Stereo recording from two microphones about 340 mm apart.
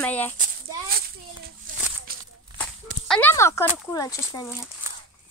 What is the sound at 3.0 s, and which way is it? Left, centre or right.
Speech, centre.